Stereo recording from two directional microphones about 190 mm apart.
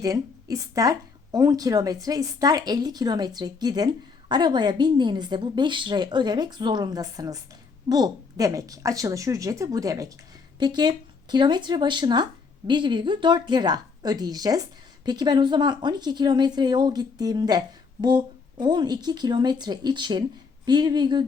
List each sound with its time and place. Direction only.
0.0 s a woman's voice: 20° right (ahead or behind)
18.6 s speech: 20° right (ahead or behind)